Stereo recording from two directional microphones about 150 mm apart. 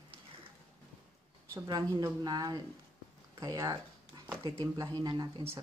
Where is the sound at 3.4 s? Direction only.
25° right (ahead or behind).